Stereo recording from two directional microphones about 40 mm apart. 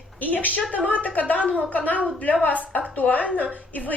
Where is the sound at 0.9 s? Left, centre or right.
Left.